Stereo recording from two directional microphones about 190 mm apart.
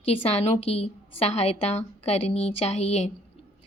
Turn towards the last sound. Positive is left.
turn(degrees=35)  # may be behind; listen again after turning